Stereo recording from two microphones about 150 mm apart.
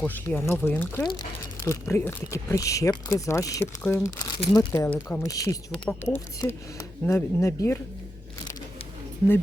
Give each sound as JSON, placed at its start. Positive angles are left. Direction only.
{"t": 0.0, "sound": "speech", "side_deg": 15}
{"t": 5.7, "sound": "speech", "side_deg": 10}